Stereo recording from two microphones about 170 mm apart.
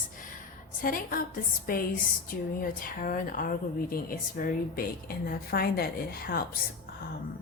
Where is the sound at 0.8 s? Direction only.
55° left (ahead or behind).